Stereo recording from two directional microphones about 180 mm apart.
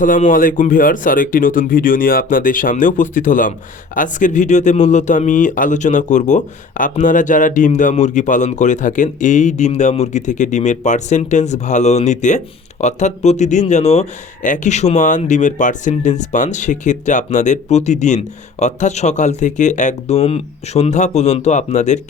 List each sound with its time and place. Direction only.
0.0 s speech: 45° left (ahead or behind)